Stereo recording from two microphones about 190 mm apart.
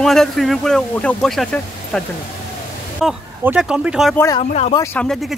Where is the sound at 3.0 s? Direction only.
5° right (ahead or behind).